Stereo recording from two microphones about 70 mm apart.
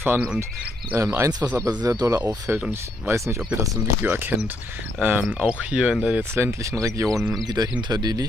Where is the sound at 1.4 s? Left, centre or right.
Right.